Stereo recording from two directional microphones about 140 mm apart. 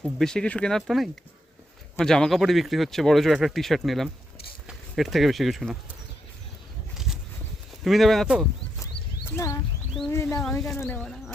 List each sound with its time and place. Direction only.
0.2 s speech: 5° left (ahead or behind)
6.9 s a sound: centre (ahead or behind)
7.9 s speech: centre (ahead or behind)
8.8 s a sound: 20° left (ahead or behind)
10.1 s speech: 20° left (ahead or behind)
11.0 s speech: centre (ahead or behind)